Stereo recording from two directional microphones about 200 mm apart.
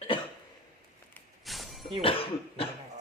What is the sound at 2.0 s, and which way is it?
Speech, 30° left (ahead or behind).